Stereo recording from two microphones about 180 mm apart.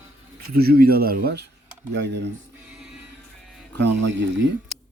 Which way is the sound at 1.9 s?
75° right (ahead or behind).